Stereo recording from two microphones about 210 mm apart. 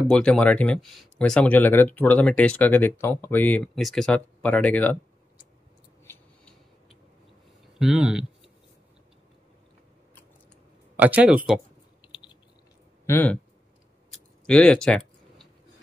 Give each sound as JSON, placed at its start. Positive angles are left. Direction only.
{"t": 0.1, "sound": "speech", "side_deg": 5}
{"t": 7.8, "sound": "speech", "side_deg": -5}
{"t": 11.0, "sound": "speech", "side_deg": -5}
{"t": 12.1, "sound": "a sound", "side_deg": 25}
{"t": 13.0, "sound": "speech", "side_deg": 10}
{"t": 14.4, "sound": "a sound", "side_deg": 5}